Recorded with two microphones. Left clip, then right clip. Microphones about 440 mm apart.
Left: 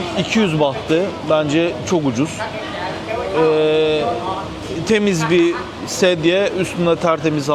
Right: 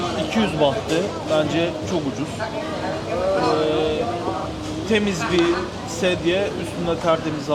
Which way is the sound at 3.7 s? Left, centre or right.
Left.